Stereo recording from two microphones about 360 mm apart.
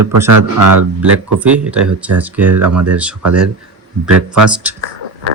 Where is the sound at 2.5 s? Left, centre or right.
Right.